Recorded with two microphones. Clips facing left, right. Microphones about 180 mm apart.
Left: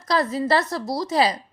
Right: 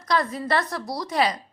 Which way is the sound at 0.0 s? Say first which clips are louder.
Left 3 dB; 30° left (ahead or behind).